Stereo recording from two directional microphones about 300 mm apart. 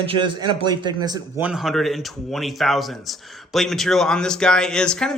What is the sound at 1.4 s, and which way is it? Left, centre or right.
Speech, centre.